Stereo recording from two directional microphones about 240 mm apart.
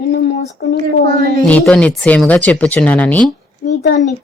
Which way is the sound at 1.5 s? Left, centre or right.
Centre.